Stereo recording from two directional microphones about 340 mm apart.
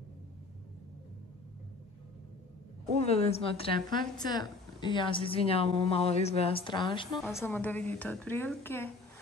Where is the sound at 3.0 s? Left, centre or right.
Centre.